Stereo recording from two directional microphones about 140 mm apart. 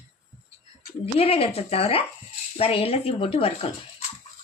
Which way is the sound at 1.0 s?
45° left (ahead or behind).